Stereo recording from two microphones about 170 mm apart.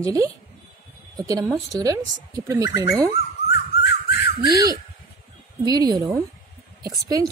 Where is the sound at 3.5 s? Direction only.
75° left (ahead or behind).